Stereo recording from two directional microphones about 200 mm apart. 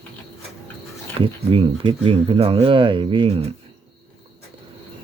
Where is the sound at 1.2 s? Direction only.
25° right (ahead or behind).